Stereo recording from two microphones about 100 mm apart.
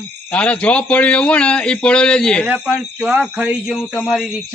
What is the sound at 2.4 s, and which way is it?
Speech, 15° right (ahead or behind).